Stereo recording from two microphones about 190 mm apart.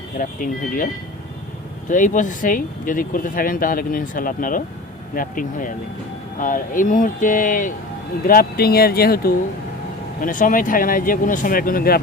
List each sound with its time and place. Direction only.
0.2 s speech: 45° left (ahead or behind)
1.9 s speech: 45° left (ahead or behind)